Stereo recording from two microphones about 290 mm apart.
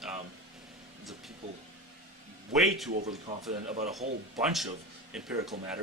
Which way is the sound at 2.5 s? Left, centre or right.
Centre.